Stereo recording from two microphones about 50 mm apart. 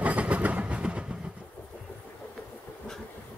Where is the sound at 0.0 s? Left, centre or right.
Right.